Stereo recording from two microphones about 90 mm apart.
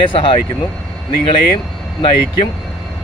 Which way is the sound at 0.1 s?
70° left (ahead or behind).